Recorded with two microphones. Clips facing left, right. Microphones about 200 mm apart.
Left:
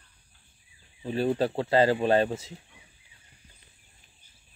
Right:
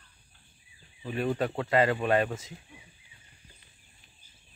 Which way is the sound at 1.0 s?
30° left (ahead or behind).